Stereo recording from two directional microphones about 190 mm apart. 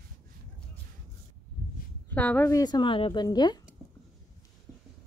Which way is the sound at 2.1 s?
10° left (ahead or behind).